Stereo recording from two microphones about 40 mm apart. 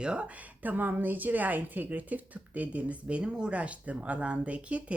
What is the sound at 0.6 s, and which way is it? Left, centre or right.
A woman's voice, right.